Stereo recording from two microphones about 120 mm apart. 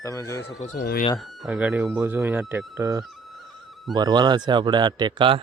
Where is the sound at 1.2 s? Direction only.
5° right (ahead or behind); by 3.0 s 25° right (ahead or behind).